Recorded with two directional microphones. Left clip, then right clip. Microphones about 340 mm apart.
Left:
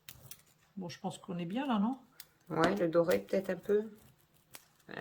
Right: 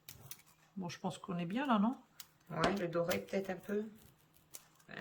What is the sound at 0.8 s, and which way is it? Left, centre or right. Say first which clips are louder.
Speech: left 1 dB; centre.